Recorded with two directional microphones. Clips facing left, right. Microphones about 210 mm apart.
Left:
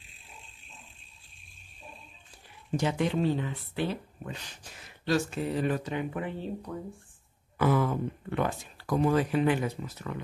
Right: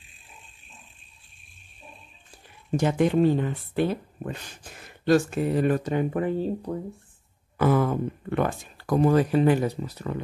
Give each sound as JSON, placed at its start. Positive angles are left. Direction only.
{"t": 2.7, "sound": "speech", "side_deg": -50}